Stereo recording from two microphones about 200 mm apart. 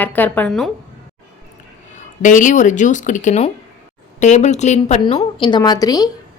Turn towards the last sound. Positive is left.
turn(degrees=20)  # may be behind; listen again after turning